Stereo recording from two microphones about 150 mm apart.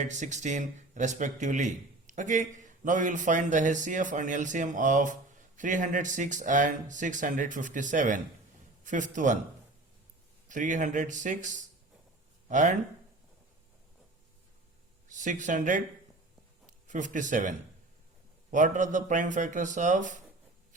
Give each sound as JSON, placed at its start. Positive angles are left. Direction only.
{"t": 0.0, "sound": "speech", "side_deg": -50}
{"t": 10.5, "sound": "speech", "side_deg": -55}
{"t": 15.1, "sound": "speech", "side_deg": -55}
{"t": 18.5, "sound": "speech", "side_deg": -55}